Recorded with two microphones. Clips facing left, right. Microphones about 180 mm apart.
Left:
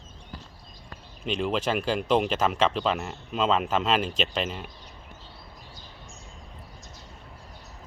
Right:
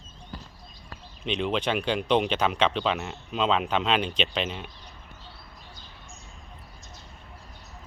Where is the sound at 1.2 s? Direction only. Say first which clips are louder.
Even; centre (ahead or behind).